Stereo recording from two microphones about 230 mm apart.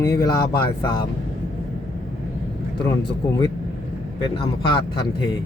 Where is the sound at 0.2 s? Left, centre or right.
Centre.